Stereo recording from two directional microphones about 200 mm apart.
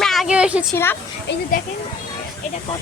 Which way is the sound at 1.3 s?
60° left (ahead or behind).